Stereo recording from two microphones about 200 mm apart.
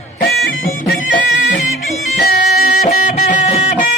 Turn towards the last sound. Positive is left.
turn(degrees=35)  # may be behind; listen again after turning